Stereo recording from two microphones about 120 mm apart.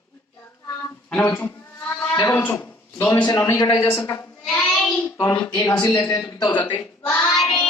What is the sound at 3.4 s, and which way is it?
Speech, 30° left (ahead or behind).